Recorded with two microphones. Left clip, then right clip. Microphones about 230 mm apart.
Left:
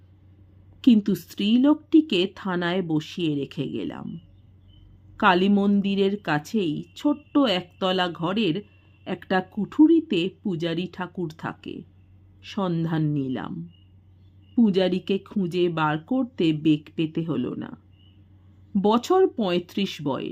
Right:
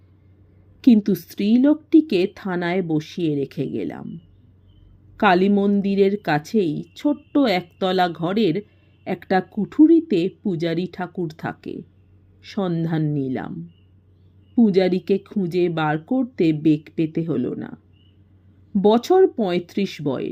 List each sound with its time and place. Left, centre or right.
0.8 s speech: centre
5.1 s speech: centre
14.5 s speech: centre